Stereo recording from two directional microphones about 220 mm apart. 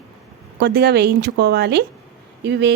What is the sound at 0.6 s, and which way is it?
A woman's voice, 45° right (ahead or behind).